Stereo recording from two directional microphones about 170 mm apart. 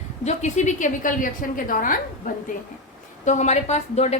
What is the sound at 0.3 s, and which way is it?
A woman's voice, 45° left (ahead or behind).